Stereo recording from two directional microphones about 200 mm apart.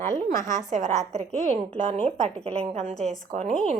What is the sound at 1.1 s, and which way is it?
Speech, 35° right (ahead or behind).